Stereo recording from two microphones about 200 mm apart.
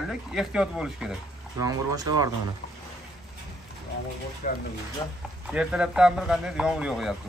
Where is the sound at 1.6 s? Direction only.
20° right (ahead or behind).